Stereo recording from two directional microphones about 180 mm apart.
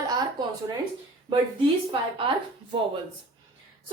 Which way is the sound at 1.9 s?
30° right (ahead or behind).